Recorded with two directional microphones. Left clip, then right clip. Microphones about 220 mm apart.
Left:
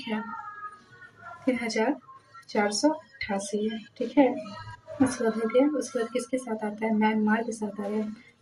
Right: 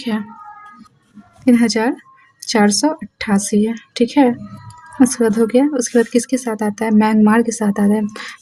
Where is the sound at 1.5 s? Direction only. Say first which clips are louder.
Right 10 dB; 55° right (ahead or behind).